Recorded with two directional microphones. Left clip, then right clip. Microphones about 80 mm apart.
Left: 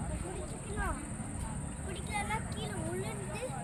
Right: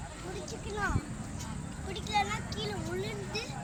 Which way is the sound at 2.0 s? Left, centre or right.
Left.